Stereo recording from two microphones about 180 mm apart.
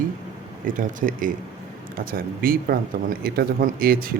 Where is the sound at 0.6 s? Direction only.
50° right (ahead or behind).